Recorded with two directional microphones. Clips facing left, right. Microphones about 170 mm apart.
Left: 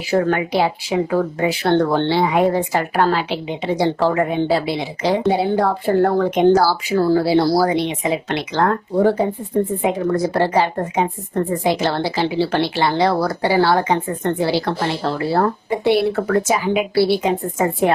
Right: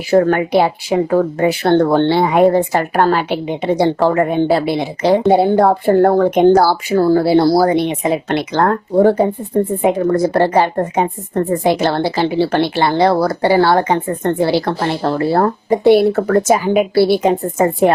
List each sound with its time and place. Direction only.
0.1 s a woman's voice: 50° right (ahead or behind)